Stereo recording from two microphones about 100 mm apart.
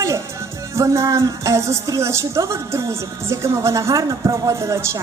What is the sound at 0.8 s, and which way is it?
A woman's voice, 30° right (ahead or behind).